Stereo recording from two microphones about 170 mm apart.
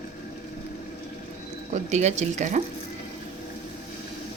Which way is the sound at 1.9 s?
40° right (ahead or behind).